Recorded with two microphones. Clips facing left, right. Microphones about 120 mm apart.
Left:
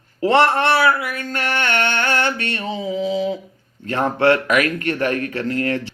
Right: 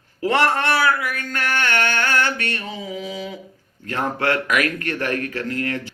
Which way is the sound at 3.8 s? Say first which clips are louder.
Left 6 dB; 25° left (ahead or behind).